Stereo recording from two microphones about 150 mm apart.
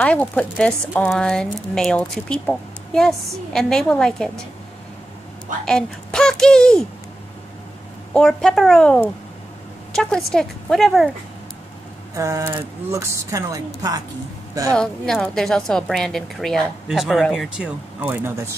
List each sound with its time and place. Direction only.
0.0 s a woman's voice: 10° left (ahead or behind)
5.7 s a woman's voice: 5° left (ahead or behind)
8.1 s a woman's voice: 5° left (ahead or behind)
12.2 s speech: 20° right (ahead or behind)
14.7 s a woman's voice: 5° left (ahead or behind)